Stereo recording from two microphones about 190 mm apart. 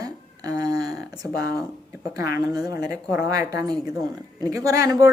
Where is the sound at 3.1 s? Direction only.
15° right (ahead or behind).